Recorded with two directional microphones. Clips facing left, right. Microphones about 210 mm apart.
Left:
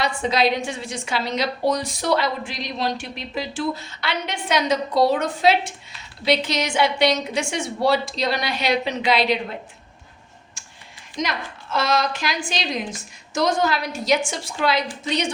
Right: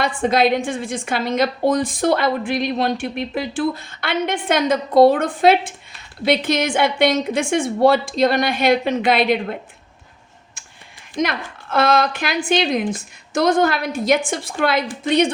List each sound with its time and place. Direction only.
0.0 s a woman's voice: 50° right (ahead or behind)
11.2 s a woman's voice: 55° right (ahead or behind)